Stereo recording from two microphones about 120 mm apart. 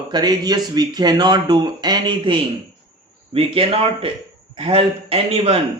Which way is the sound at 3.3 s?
50° right (ahead or behind).